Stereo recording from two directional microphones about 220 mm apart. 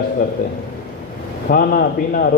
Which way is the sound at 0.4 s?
40° left (ahead or behind).